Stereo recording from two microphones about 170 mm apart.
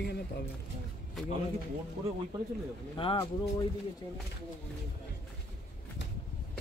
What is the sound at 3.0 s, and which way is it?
Speech, 30° left (ahead or behind).